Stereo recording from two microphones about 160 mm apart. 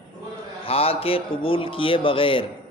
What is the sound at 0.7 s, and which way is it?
A man's voice, 35° left (ahead or behind).